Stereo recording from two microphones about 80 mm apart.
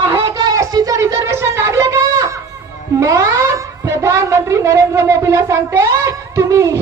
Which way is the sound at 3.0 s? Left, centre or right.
Right.